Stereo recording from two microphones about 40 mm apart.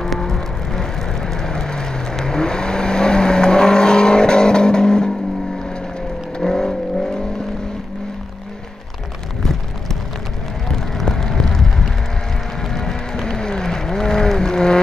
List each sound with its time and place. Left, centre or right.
0.0 s vehicle: centre
6.3 s vehicle: centre
11.0 s vehicle: centre
12.6 s a sound: centre